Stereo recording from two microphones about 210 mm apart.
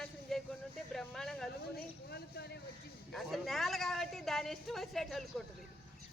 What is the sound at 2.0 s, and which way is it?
Speech, 50° left (ahead or behind).